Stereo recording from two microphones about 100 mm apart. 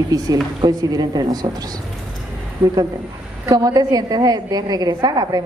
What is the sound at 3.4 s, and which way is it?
A woman's voice, 40° right (ahead or behind).